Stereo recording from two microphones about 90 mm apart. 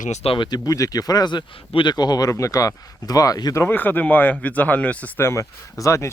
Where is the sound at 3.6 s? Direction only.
25° left (ahead or behind).